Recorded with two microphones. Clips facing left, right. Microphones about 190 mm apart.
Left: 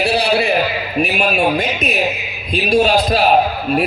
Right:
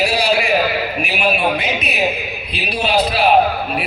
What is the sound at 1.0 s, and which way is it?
A man's voice, 40° left (ahead or behind).